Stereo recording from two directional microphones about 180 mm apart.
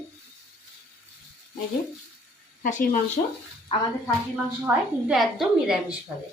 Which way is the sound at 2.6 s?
45° left (ahead or behind).